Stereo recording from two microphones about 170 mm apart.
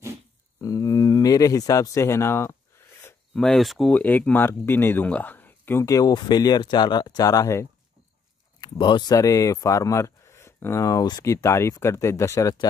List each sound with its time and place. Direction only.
0.6 s speech: 20° left (ahead or behind)
3.3 s speech: centre (ahead or behind); by 12.6 s 20° left (ahead or behind)